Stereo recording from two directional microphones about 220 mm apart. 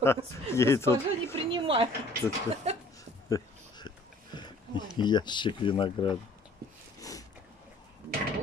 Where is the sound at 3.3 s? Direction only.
20° left (ahead or behind).